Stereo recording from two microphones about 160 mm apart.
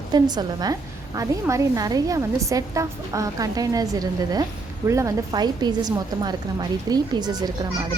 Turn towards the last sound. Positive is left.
turn(degrees=-25)  # may be behind; listen again after turning